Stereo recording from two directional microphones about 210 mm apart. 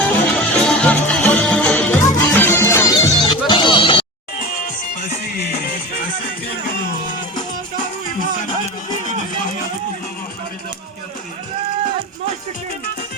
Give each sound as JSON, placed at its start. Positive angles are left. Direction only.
{"t": 0.0, "sound": "music", "side_deg": 5}
{"t": 4.6, "sound": "music", "side_deg": 35}